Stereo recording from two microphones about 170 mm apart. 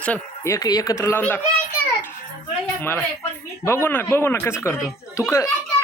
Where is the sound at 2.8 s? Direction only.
15° left (ahead or behind).